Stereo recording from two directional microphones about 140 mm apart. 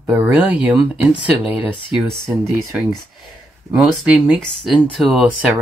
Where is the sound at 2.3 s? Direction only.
20° right (ahead or behind).